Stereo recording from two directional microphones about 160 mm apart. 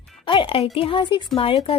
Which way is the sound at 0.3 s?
35° left (ahead or behind).